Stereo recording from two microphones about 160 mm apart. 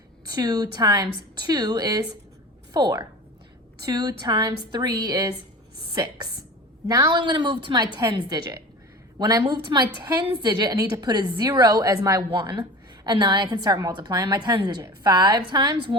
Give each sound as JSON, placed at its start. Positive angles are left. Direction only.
{"t": 0.3, "sound": "a woman's voice", "side_deg": -25}